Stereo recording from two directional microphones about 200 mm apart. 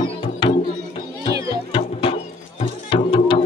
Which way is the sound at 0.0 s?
25° left (ahead or behind).